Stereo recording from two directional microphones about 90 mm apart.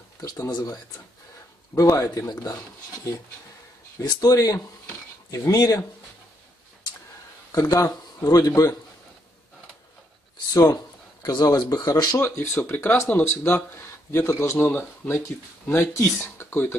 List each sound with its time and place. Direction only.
0.5 s speech: 50° left (ahead or behind)
1.9 s speech: 35° left (ahead or behind)
4.0 s speech: 45° left (ahead or behind)
7.5 s speech: 45° left (ahead or behind)
10.5 s speech: 45° left (ahead or behind)
12.2 s a man's voice: 30° left (ahead or behind)
14.6 s speech: 25° left (ahead or behind)